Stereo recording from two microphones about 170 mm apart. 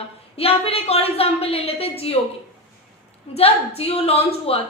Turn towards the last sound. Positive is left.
turn(degrees=35)  # may be behind; listen again after turning